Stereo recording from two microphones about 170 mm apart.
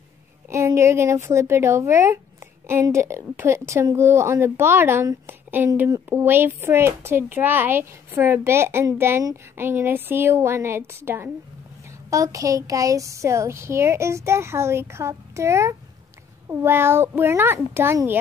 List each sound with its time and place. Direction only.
0.5 s speech: 15° right (ahead or behind)